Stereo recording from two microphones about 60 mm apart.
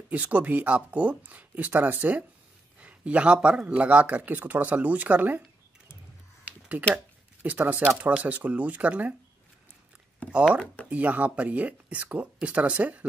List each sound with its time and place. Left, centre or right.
0.1 s a man's voice: right
7.4 s speech: right
10.3 s speech: centre